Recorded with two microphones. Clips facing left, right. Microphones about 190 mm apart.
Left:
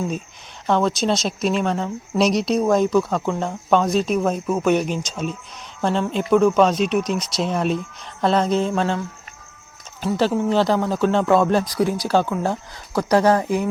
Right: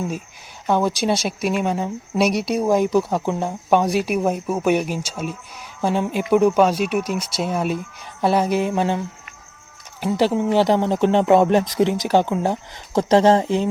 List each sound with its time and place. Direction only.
0.7 s speech: 10° right (ahead or behind)